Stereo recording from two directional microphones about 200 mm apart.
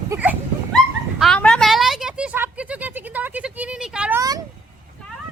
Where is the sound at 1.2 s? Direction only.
5° left (ahead or behind).